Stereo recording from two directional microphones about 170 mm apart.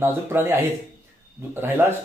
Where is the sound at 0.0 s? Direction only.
15° right (ahead or behind).